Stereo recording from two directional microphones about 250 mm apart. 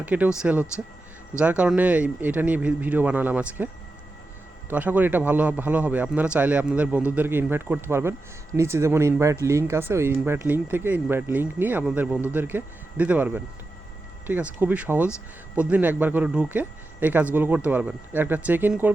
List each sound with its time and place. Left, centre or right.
0.0 s speech: centre
4.7 s speech: centre